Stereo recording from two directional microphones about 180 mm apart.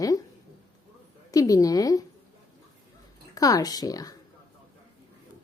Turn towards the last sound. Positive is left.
turn(degrees=20)  # may be behind; listen again after turning